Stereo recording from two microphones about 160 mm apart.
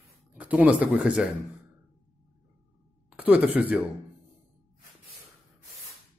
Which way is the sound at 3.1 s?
10° right (ahead or behind).